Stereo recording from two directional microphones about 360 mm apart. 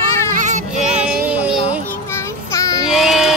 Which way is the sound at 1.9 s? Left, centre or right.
Centre.